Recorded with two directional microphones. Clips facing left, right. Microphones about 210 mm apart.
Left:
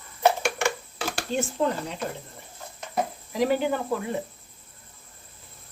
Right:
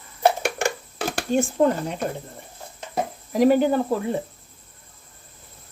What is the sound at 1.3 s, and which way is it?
Speech, 50° right (ahead or behind).